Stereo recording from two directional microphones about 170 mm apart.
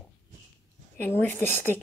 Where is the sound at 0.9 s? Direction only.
10° left (ahead or behind).